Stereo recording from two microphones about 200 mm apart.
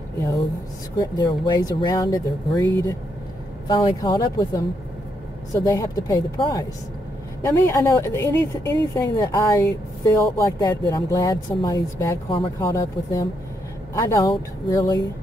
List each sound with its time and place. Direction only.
0.9 s speech: 20° left (ahead or behind)